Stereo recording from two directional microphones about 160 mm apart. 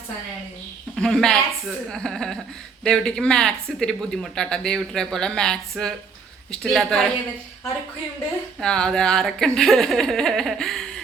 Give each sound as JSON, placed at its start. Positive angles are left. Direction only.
{"t": 0.9, "sound": "a woman's voice", "side_deg": 5}
{"t": 8.6, "sound": "speech", "side_deg": 5}